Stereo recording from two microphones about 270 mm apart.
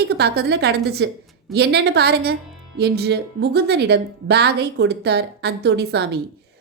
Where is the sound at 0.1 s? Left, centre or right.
Right.